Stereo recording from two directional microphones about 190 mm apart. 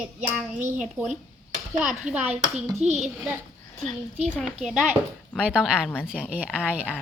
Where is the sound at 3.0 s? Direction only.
5° right (ahead or behind).